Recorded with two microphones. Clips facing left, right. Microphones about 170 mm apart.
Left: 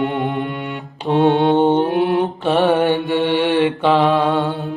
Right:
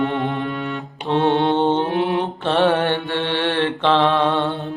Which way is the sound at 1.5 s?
15° left (ahead or behind).